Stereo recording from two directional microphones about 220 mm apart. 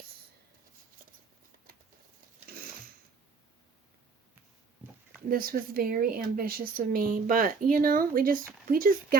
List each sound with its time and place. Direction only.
1.5 s patter: 40° right (ahead or behind)
5.3 s speech: 40° right (ahead or behind)